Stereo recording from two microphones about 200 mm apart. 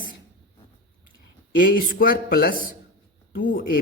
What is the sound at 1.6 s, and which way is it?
A woman's voice, 45° left (ahead or behind).